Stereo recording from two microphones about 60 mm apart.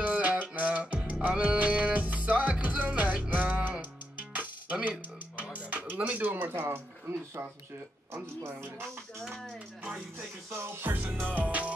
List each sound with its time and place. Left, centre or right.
0.0 s music: right
5.4 s speech: right
8.5 s music: right
10.1 s music: right